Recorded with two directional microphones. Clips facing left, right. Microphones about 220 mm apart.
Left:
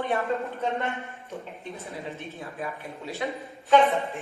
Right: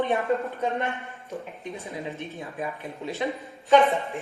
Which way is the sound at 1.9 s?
15° right (ahead or behind).